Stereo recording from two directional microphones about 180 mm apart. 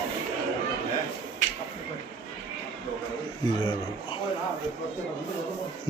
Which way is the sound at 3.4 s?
25° left (ahead or behind).